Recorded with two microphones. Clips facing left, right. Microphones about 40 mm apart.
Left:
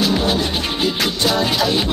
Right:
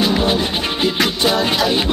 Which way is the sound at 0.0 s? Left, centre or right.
Centre.